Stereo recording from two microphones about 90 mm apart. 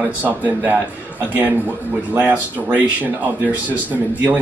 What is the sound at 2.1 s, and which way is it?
Speech, 20° right (ahead or behind).